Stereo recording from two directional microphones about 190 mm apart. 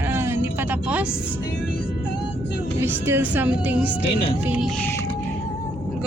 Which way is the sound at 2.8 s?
10° right (ahead or behind).